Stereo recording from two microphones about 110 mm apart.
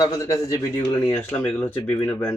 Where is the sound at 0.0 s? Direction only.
30° left (ahead or behind).